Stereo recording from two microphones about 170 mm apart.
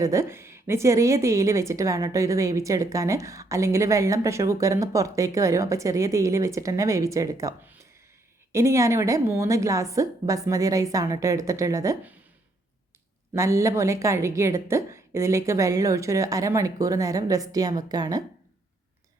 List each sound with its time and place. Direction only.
0.0 s a woman's voice: 15° right (ahead or behind)
13.3 s a woman's voice: 20° right (ahead or behind)